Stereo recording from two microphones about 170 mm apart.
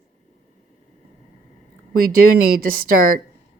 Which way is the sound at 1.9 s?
60° right (ahead or behind).